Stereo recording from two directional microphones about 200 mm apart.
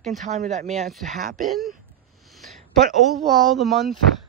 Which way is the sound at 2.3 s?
Centre (ahead or behind).